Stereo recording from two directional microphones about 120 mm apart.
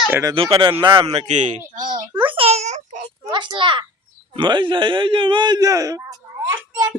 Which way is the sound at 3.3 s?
40° right (ahead or behind).